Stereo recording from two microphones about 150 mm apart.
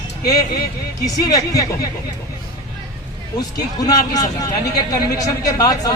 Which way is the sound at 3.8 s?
25° left (ahead or behind).